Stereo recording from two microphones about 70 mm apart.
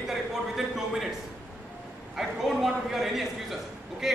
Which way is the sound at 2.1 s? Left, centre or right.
Centre.